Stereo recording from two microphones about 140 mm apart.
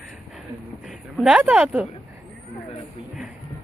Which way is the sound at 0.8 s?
Centre (ahead or behind).